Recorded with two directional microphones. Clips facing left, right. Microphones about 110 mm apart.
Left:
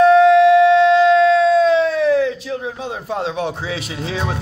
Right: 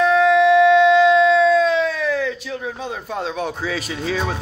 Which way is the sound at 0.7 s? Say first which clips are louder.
Left 1 dB; 35° left (ahead or behind).